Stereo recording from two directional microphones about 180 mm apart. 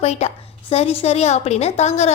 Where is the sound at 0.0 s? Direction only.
35° left (ahead or behind).